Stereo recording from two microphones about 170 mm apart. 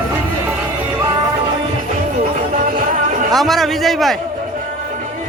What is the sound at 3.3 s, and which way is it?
Speech, centre (ahead or behind).